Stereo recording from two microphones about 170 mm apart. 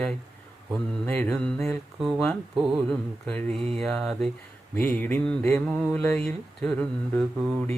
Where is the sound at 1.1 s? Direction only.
10° left (ahead or behind).